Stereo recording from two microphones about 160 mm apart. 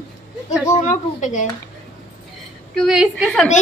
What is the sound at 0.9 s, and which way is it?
Speech, 50° left (ahead or behind).